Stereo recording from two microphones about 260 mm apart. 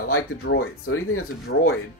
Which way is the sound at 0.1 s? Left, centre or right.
Left.